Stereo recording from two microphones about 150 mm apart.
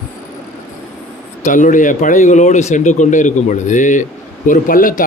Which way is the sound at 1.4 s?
60° left (ahead or behind).